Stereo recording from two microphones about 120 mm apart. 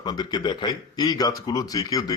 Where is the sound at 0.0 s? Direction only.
35° left (ahead or behind).